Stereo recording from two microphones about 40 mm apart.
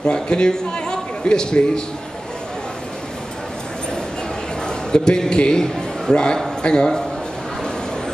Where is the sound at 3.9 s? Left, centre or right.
Centre.